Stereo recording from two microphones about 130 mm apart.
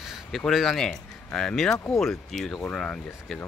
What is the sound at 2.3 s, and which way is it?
Speech, centre (ahead or behind).